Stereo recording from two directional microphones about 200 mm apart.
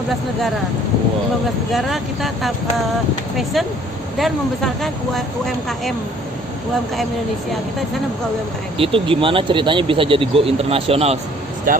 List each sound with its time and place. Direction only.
1.7 s speech: centre (ahead or behind)
8.8 s speech: 25° right (ahead or behind)
11.7 s speech: 45° right (ahead or behind)